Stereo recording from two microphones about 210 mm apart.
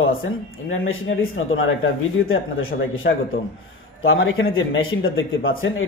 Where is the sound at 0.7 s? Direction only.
70° left (ahead or behind).